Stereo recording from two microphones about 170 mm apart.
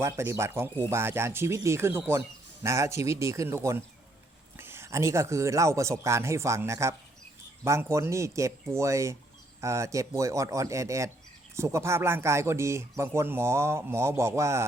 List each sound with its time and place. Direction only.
0.0 s speech: 15° right (ahead or behind)